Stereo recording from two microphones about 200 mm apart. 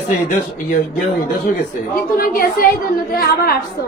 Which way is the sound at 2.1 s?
45° left (ahead or behind).